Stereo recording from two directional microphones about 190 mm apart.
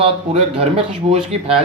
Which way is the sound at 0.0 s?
30° right (ahead or behind).